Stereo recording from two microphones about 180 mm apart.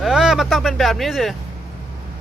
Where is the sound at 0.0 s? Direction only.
5° right (ahead or behind).